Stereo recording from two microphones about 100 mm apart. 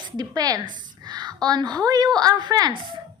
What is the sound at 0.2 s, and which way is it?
A woman's voice, 40° right (ahead or behind).